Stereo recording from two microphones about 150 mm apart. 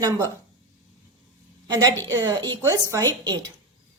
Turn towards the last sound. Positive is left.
turn(degrees=-25)  # may be behind; listen again after turning